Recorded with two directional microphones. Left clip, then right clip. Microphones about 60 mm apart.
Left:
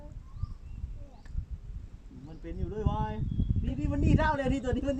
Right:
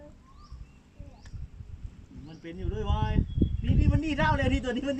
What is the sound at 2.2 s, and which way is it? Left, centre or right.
A child's voice, left.